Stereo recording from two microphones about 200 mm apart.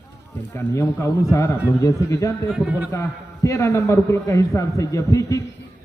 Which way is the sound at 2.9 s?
15° left (ahead or behind).